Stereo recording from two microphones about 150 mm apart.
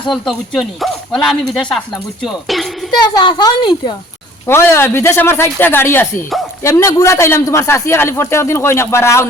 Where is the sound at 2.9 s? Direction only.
30° left (ahead or behind).